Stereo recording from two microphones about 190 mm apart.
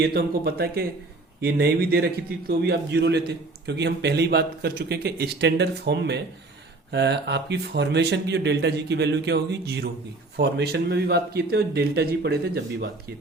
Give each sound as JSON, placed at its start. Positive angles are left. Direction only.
{"t": 0.0, "sound": "a man's voice", "side_deg": -55}